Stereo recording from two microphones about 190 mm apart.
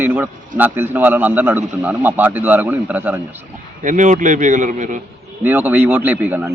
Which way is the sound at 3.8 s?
40° right (ahead or behind).